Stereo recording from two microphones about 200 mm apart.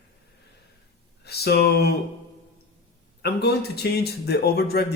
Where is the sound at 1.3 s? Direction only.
55° left (ahead or behind).